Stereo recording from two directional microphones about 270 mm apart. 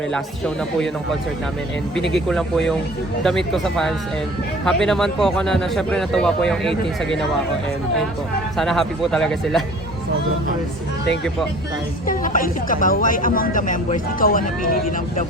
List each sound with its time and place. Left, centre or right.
0.1 s a man's voice: centre
2.0 s a man's voice: centre
8.5 s a man's voice: centre
12.0 s speech: left